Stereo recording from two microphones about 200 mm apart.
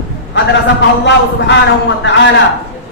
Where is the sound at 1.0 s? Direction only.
65° left (ahead or behind).